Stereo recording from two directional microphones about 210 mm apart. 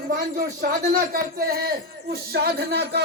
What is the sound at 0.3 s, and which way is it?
Speech, 45° right (ahead or behind).